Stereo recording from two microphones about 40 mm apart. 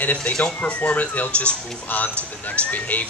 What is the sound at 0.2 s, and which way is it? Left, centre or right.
Speech, left.